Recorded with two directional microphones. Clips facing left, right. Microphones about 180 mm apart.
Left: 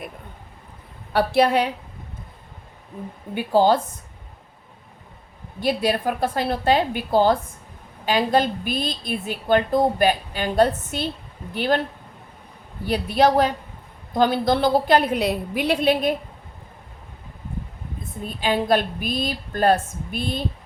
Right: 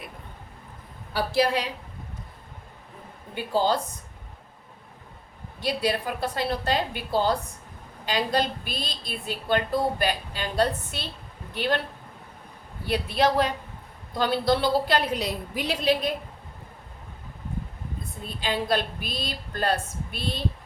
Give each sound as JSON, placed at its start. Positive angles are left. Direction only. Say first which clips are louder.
{"t": 1.1, "sound": "a woman's voice", "louder": "left 6 dB", "side_deg": 60}
{"t": 3.3, "sound": "a woman's voice", "louder": "left 6 dB", "side_deg": 55}
{"t": 5.6, "sound": "a woman's voice", "louder": "left 5 dB", "side_deg": 55}
{"t": 12.9, "sound": "a woman's voice", "louder": "left 5 dB", "side_deg": 45}
{"t": 18.4, "sound": "a woman's voice", "louder": "left 6 dB", "side_deg": 55}